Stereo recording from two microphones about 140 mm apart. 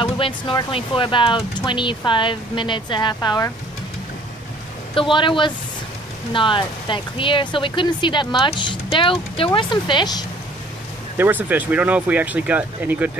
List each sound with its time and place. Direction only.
0.0 s speech: 35° left (ahead or behind)
4.9 s speech: 35° left (ahead or behind)
11.1 s speech: 15° right (ahead or behind)